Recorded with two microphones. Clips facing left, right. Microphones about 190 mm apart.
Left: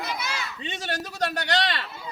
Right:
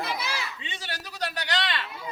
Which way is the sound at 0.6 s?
45° left (ahead or behind).